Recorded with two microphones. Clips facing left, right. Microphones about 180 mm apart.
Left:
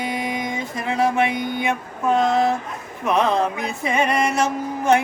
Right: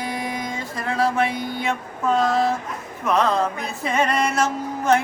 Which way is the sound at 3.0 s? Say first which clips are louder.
Left 1 dB; 20° left (ahead or behind).